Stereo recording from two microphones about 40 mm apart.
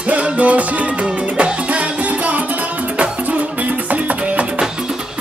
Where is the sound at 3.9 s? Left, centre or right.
Right.